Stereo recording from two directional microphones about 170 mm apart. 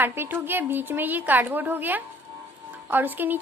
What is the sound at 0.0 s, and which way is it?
A woman's voice, 10° right (ahead or behind).